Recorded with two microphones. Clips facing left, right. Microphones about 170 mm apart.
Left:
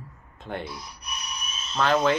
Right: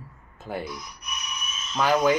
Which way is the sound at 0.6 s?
30° left (ahead or behind).